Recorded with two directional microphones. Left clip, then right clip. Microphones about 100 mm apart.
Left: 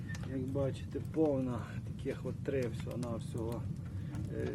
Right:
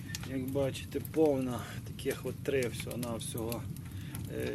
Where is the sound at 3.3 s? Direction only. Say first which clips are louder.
Right 2 dB; 10° right (ahead or behind).